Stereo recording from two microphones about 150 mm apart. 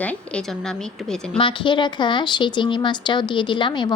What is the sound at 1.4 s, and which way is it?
Speech, 35° left (ahead or behind).